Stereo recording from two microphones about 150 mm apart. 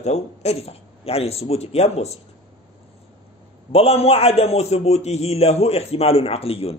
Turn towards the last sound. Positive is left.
turn(degrees=40)  # may be behind; listen again after turning